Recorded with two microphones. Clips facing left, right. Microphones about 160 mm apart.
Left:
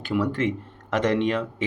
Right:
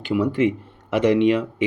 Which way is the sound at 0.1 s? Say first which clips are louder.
Right 4 dB; 10° right (ahead or behind).